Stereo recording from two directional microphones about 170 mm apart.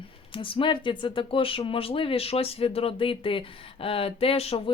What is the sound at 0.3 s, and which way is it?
Speech, 30° left (ahead or behind).